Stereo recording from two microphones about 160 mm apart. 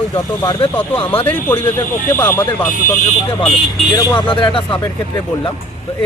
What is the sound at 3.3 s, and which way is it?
Speech, 30° left (ahead or behind).